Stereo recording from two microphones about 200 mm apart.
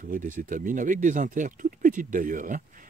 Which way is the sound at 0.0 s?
40° right (ahead or behind).